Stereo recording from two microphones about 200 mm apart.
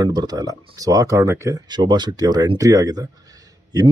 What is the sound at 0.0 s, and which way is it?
Speech, 20° right (ahead or behind).